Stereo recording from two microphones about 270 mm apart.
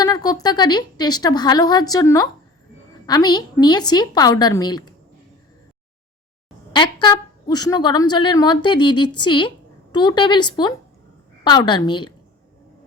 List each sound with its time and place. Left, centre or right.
0.0 s a woman's voice: centre
6.7 s a woman's voice: centre